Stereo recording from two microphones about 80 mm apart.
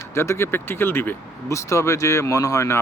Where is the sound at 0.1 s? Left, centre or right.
Left.